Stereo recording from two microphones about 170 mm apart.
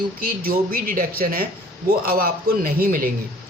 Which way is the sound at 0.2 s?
60° right (ahead or behind).